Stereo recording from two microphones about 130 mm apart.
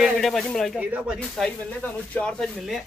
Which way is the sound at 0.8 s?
10° right (ahead or behind).